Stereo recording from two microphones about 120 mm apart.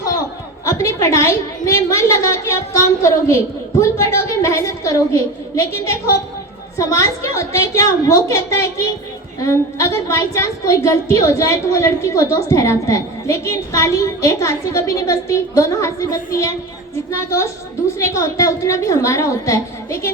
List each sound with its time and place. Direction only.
0.7 s a woman's voice: 25° left (ahead or behind)
6.7 s a woman's voice: 25° left (ahead or behind)
17.9 s a woman's voice: 25° left (ahead or behind)